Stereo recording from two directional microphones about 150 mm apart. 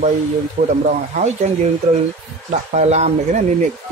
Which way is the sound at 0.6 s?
50° right (ahead or behind).